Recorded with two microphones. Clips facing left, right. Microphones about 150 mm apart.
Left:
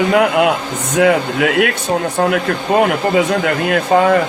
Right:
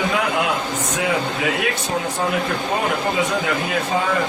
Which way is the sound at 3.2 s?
65° left (ahead or behind).